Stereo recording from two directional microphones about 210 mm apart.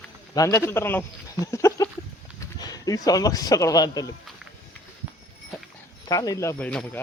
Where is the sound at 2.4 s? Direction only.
15° left (ahead or behind).